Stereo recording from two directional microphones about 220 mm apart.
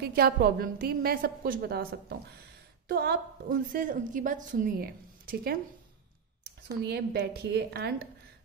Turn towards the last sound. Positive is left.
turn(degrees=-45)  # may be behind; listen again after turning